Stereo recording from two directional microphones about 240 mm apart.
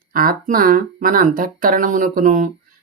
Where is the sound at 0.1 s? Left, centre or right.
Right.